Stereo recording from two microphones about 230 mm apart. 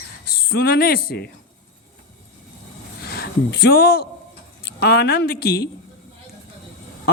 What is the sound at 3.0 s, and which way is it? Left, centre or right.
Speech, left.